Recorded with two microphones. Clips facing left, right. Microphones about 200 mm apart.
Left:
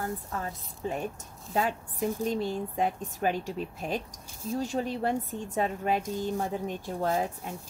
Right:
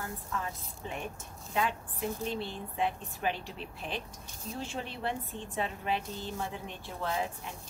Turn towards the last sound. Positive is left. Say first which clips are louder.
# left 5 dB
turn(degrees=45)  # may be behind; listen again after turning